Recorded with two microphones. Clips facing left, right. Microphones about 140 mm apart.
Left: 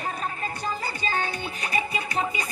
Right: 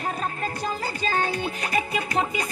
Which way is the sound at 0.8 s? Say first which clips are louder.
Right 5 dB; 40° right (ahead or behind).